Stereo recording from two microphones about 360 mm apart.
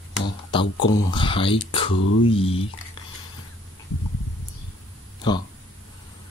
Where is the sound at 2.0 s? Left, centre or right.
Left.